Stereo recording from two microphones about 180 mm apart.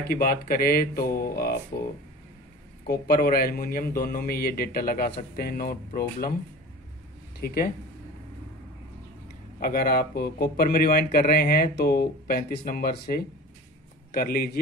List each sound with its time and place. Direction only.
0.1 s speech: 55° left (ahead or behind)
2.9 s speech: 55° left (ahead or behind)
7.3 s speech: 55° left (ahead or behind)
9.6 s speech: 55° left (ahead or behind)